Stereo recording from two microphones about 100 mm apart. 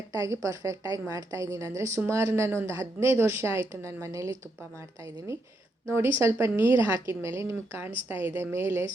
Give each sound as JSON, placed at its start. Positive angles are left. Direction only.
{"t": 0.1, "sound": "a woman's voice", "side_deg": -35}
{"t": 6.1, "sound": "a woman's voice", "side_deg": -25}